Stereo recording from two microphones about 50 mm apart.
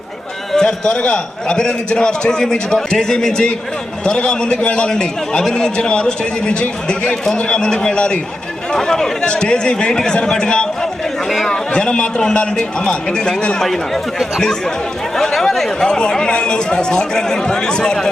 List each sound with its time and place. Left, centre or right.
0.5 s a man's voice: centre
11.3 s speech: centre
11.7 s a man's voice: centre